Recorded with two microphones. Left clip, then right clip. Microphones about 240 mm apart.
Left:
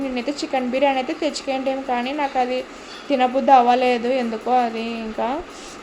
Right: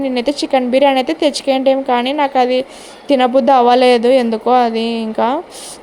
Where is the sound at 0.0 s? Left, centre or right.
Right.